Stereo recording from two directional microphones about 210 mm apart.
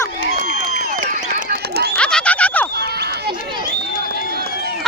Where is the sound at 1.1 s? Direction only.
40° right (ahead or behind).